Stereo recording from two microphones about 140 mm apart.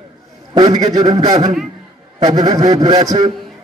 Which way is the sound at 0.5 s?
30° right (ahead or behind).